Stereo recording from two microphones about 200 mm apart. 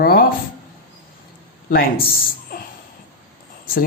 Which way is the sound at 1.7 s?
50° left (ahead or behind).